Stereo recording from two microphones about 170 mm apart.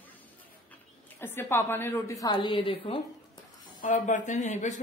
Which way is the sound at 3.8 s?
50° left (ahead or behind).